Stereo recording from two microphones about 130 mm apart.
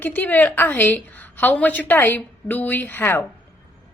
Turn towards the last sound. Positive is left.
turn(degrees=15)  # may be behind; listen again after turning